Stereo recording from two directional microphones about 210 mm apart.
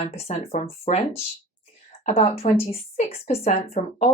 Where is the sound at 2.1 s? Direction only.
30° left (ahead or behind).